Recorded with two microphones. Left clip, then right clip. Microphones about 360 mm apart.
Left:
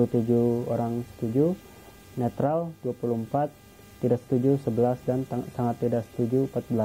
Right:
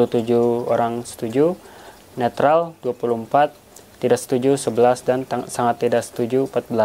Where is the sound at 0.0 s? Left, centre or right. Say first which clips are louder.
Right 7 dB; centre.